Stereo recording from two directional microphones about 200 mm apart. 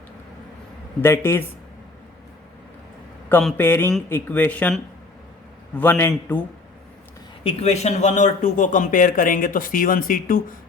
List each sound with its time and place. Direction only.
1.0 s speech: 10° left (ahead or behind)
3.2 s speech: 10° left (ahead or behind)
7.4 s a man's voice: 35° left (ahead or behind)